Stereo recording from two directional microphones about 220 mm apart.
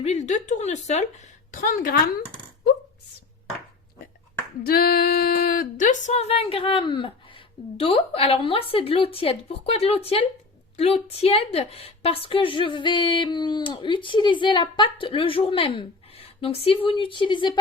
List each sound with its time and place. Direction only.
0.0 s speech: 30° left (ahead or behind)
4.6 s a woman's voice: 45° left (ahead or behind); by 17.6 s 20° left (ahead or behind)